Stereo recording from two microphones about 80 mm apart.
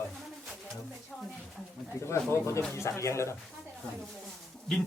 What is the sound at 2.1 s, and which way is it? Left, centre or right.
Speech, left.